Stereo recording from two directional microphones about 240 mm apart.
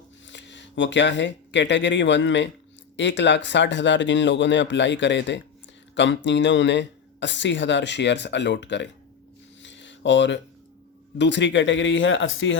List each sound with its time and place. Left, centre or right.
0.3 s speech: left
9.6 s a sound: left
11.2 s speech: left